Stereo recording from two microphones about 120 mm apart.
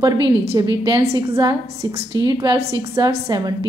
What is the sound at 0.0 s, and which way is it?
A woman's voice, 30° right (ahead or behind).